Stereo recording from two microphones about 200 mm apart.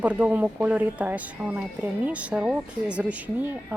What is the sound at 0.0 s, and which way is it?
Speech, 5° right (ahead or behind).